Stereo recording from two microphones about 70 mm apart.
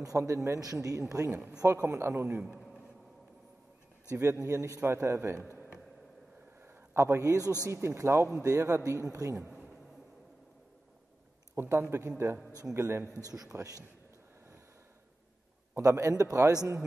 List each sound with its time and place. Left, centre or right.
0.0 s a man's voice: right
0.6 s a man's voice: right
1.3 s speech: centre
1.7 s a man's voice: right
4.1 s a man's voice: right
6.6 s a man's voice: right
7.7 s a man's voice: right
11.5 s a man's voice: right
13.2 s speech: right
15.7 s a man's voice: right